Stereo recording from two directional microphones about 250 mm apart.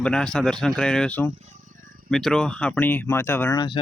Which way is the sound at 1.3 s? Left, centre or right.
Right.